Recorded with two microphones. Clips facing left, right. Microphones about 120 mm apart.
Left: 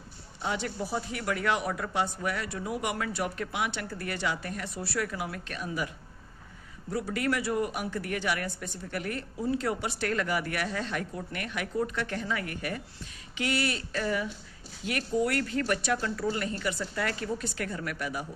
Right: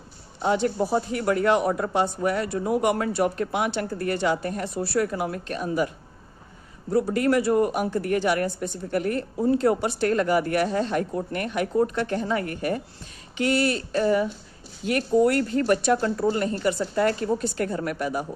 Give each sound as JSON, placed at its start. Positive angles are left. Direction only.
{"t": 0.4, "sound": "speech", "side_deg": -45}
{"t": 6.9, "sound": "speech", "side_deg": -40}